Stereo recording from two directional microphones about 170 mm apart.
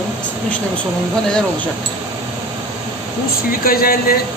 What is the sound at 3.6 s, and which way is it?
Speech, 60° left (ahead or behind).